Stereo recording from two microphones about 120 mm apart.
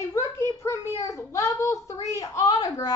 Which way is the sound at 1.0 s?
25° left (ahead or behind).